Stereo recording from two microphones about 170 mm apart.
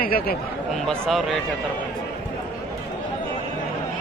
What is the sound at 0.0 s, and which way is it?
Speech, 60° left (ahead or behind).